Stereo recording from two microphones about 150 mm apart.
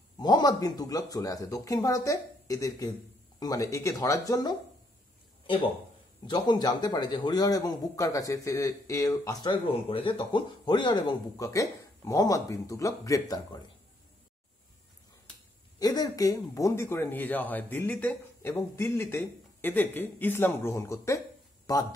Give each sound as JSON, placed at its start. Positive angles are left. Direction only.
{"t": 0.2, "sound": "a man's voice", "side_deg": 25}
{"t": 6.2, "sound": "a man's voice", "side_deg": 30}
{"t": 15.8, "sound": "speech", "side_deg": 25}